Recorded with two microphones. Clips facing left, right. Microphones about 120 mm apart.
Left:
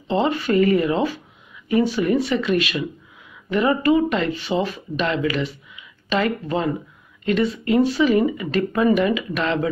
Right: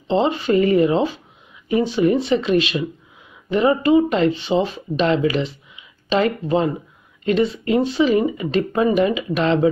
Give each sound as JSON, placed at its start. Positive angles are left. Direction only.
{"t": 0.1, "sound": "speech", "side_deg": -25}